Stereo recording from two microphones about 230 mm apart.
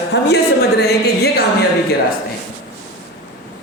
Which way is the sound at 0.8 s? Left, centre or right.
Left.